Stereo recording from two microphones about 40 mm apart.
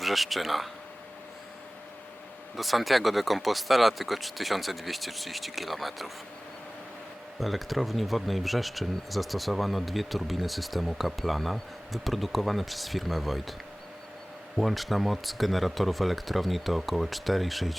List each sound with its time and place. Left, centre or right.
0.0 s speech: centre
2.6 s speech: centre
7.3 s speech: centre